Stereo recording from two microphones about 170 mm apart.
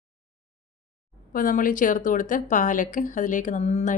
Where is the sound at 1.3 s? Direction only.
55° left (ahead or behind).